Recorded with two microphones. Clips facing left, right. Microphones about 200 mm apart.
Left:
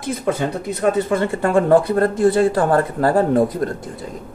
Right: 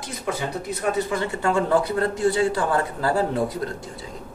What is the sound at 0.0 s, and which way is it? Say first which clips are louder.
Speech: left 7 dB; 55° left (ahead or behind).